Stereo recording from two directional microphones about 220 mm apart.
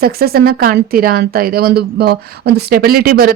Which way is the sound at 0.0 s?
45° right (ahead or behind).